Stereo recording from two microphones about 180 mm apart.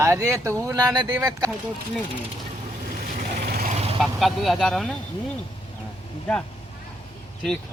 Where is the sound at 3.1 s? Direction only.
55° right (ahead or behind).